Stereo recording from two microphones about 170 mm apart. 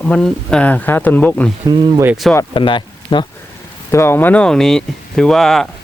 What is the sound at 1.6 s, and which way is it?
Speech, 15° right (ahead or behind).